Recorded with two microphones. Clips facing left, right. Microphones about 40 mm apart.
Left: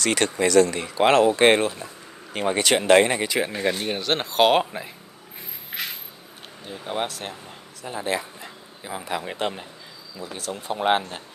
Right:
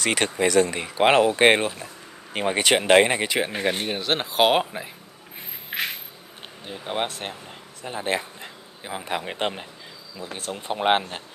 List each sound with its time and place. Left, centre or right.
0.0 s speech: centre
3.8 s speech: centre
5.7 s a sound: right
6.6 s speech: right